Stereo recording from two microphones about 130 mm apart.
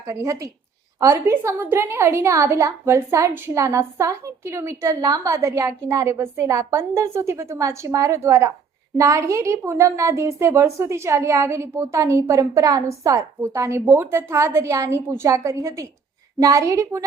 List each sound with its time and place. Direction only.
0.1 s a woman's voice: 25° right (ahead or behind)